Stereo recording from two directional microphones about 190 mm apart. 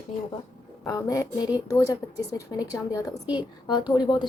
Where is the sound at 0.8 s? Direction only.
15° left (ahead or behind).